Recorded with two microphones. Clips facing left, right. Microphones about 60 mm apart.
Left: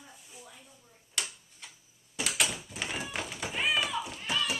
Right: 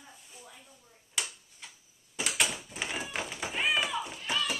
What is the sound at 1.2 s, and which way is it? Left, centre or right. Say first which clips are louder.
Tick-tock: even; centre.